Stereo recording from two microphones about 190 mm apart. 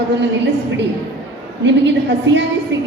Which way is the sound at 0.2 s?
70° right (ahead or behind).